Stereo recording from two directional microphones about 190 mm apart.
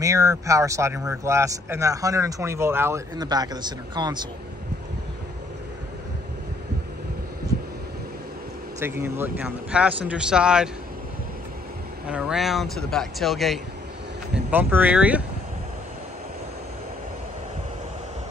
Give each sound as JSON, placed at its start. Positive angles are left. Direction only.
{"t": 0.0, "sound": "speech", "side_deg": -15}
{"t": 8.7, "sound": "speech", "side_deg": -10}
{"t": 12.1, "sound": "speech", "side_deg": -5}